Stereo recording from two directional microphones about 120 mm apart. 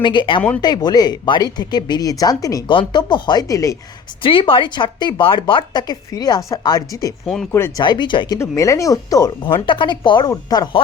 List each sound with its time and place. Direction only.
0.0 s a woman's voice: 40° left (ahead or behind)
2.6 s a woman's voice: 40° left (ahead or behind)
4.2 s a woman's voice: 45° left (ahead or behind)
8.4 s speech: 25° left (ahead or behind)
9.6 s a woman's voice: 40° left (ahead or behind)